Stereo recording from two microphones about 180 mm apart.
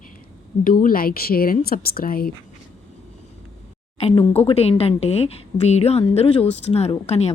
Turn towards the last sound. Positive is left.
turn(degrees=35)  # may be behind; listen again after turning